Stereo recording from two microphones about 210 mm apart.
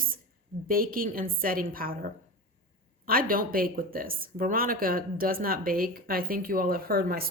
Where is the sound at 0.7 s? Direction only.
45° right (ahead or behind).